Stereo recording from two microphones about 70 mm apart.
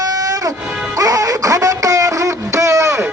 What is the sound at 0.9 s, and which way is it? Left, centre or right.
Music, right.